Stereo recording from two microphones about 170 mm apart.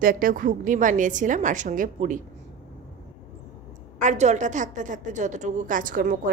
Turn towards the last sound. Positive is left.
turn(degrees=-50)  # may be behind; listen again after turning